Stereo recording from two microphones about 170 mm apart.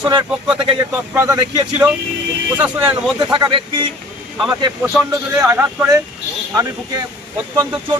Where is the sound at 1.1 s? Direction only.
20° right (ahead or behind).